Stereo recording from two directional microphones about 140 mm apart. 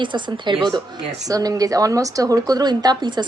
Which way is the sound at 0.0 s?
35° right (ahead or behind).